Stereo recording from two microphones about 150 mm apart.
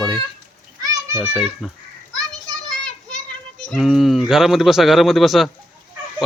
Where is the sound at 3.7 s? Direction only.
Centre (ahead or behind).